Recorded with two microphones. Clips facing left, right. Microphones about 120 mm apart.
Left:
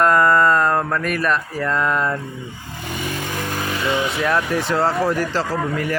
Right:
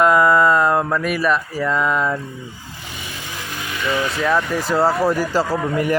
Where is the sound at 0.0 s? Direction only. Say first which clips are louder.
Right 1 dB; 5° right (ahead or behind).